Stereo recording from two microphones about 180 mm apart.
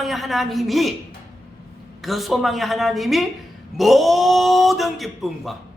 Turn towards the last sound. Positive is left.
turn(degrees=0)  # may be behind; listen again after turning